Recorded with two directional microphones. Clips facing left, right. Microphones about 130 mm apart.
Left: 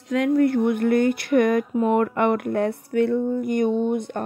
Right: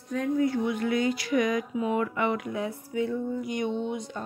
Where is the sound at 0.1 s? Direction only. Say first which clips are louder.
Left 7 dB; 80° left.